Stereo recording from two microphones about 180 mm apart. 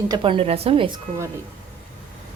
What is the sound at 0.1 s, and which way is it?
Speech, 30° right (ahead or behind).